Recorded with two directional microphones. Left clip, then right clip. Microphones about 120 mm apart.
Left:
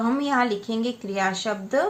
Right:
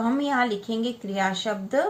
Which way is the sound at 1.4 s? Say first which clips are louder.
Left 1 dB; 40° left (ahead or behind).